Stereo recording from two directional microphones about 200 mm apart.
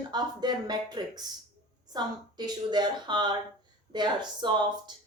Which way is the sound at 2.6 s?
20° right (ahead or behind).